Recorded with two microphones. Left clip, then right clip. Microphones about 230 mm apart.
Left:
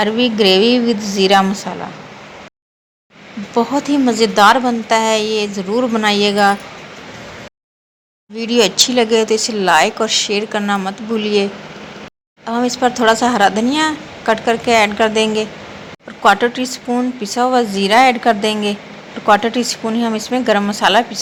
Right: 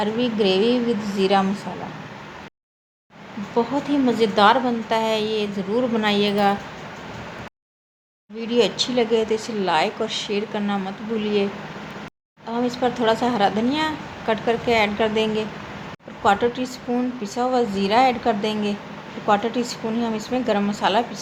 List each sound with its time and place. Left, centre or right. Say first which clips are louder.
0.0 s a woman's voice: left 8 dB; centre
3.5 s speech: left 6 dB; centre
8.4 s speech: left 7 dB; centre
12.5 s speech: left 7 dB; centre